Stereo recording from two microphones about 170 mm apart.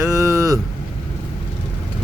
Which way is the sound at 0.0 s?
15° right (ahead or behind).